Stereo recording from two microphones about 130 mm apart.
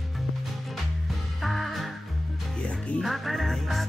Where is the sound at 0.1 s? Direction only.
Centre (ahead or behind).